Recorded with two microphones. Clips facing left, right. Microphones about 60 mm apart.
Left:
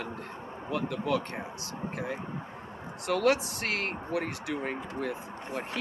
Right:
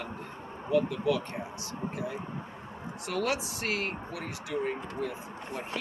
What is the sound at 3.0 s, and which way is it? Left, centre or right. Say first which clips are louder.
Speech: left 5 dB; left.